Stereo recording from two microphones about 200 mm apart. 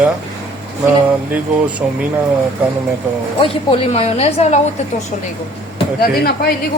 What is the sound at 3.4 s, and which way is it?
A woman's voice, 30° left (ahead or behind).